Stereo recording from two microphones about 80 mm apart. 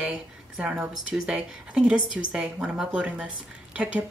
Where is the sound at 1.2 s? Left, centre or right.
Centre.